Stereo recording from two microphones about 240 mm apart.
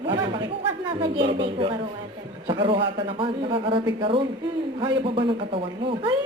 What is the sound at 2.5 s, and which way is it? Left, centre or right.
A man's voice, right.